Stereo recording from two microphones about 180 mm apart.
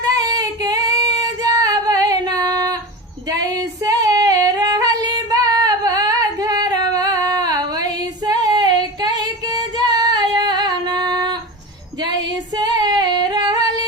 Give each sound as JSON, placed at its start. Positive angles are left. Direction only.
{"t": 0.0, "sound": "female singing", "side_deg": -20}
{"t": 3.2, "sound": "yodeling", "side_deg": -20}
{"t": 12.5, "sound": "female singing", "side_deg": -25}